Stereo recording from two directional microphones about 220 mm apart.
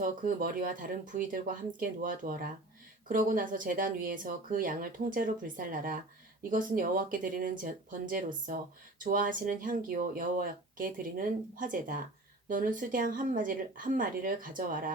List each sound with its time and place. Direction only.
0.0 s speech: 40° right (ahead or behind)